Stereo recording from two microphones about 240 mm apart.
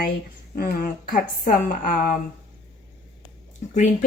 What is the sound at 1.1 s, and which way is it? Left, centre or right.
A woman's voice, left.